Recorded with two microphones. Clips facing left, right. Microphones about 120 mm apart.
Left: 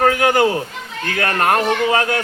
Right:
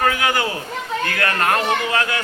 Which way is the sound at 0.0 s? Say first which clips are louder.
Left 5 dB; 50° left (ahead or behind).